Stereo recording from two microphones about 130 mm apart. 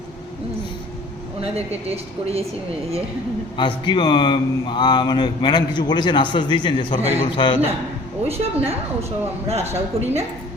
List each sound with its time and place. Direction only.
1.4 s a woman's voice: 50° right (ahead or behind)
3.6 s speech: 35° left (ahead or behind)
8.3 s a woman's voice: 50° right (ahead or behind)